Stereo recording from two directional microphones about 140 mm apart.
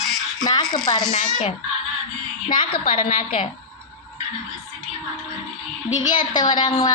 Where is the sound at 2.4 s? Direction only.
35° left (ahead or behind).